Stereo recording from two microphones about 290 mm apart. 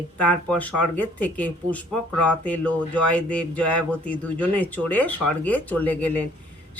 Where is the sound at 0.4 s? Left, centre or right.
Centre.